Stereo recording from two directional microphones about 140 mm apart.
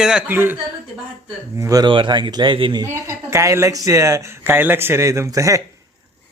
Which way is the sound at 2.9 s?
20° right (ahead or behind).